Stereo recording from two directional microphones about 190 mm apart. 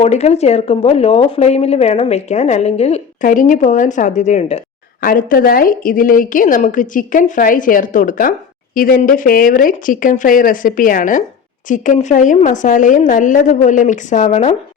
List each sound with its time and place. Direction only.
0.0 s speech: 35° left (ahead or behind)
4.9 s a woman's voice: 50° left (ahead or behind)